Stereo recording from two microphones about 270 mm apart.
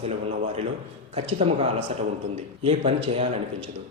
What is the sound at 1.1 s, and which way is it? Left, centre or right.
A man's voice, right.